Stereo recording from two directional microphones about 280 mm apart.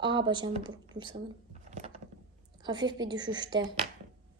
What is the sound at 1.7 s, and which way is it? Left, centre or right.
Gears, right.